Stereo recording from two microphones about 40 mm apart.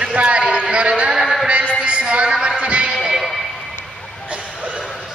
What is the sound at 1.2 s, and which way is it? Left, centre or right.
Music, centre.